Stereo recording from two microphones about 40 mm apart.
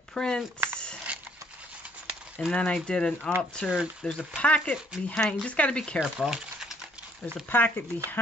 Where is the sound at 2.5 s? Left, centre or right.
Left.